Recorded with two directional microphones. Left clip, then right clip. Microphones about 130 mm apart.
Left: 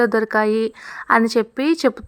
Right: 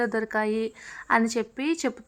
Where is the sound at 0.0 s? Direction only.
35° left (ahead or behind).